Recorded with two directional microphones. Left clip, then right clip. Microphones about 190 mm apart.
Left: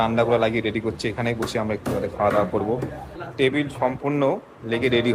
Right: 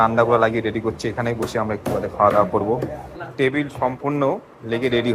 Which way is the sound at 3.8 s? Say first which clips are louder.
Right 1 dB; 5° left (ahead or behind).